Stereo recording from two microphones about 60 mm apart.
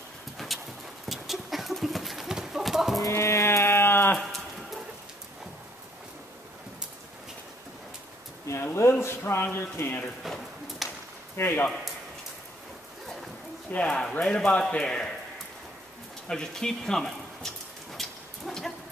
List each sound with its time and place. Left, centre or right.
0.4 s clip-clop: centre
1.0 s horse: centre
3.1 s music: left
8.5 s a sound: left
9.0 s speech: left
10.8 s a sound: centre
11.3 s speech: left
13.7 s speech: centre
16.3 s a sound: centre